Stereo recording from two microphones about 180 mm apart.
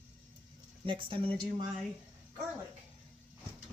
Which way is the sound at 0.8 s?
30° right (ahead or behind).